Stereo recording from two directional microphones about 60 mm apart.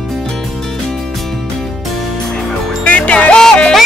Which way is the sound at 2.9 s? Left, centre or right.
Left.